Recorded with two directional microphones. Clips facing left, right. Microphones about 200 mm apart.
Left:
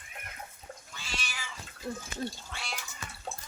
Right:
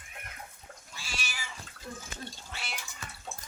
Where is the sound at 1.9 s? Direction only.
35° left (ahead or behind).